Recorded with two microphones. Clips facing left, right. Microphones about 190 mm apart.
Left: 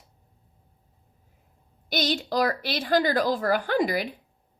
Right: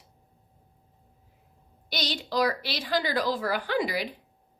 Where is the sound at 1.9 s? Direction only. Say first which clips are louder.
Left 5 dB; 50° left (ahead or behind).